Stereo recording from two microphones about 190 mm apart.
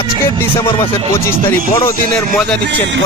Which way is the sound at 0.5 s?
30° left (ahead or behind).